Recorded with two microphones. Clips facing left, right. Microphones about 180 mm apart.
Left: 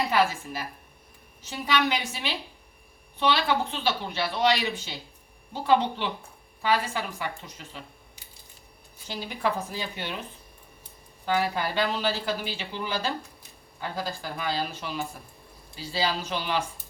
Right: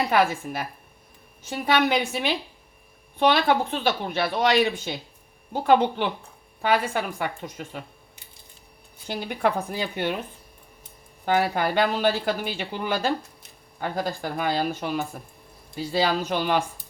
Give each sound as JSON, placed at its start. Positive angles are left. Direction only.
{"t": 0.1, "sound": "speech", "side_deg": -55}
{"t": 11.3, "sound": "speech", "side_deg": -55}